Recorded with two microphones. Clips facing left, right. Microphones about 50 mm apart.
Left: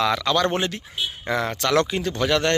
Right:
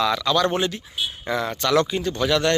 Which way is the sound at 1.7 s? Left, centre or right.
Left.